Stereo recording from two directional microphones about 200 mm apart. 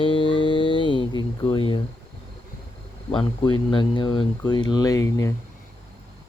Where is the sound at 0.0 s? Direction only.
25° left (ahead or behind).